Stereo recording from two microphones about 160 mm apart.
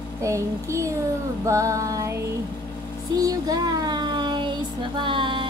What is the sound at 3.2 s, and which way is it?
Speech, 25° right (ahead or behind).